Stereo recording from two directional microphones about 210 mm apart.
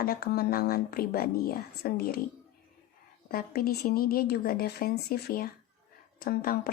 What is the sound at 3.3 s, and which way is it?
Speech, 45° left (ahead or behind).